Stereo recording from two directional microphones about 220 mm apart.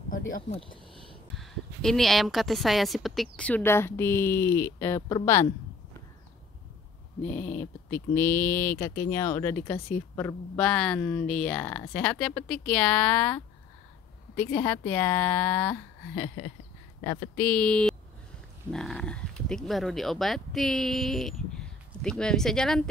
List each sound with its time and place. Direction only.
0.1 s speech: 40° left (ahead or behind)
1.3 s speech: centre (ahead or behind)
7.2 s speech: 10° left (ahead or behind)
17.4 s speech: 5° left (ahead or behind)